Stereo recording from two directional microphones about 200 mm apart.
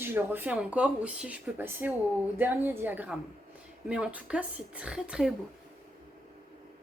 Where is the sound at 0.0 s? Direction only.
10° right (ahead or behind).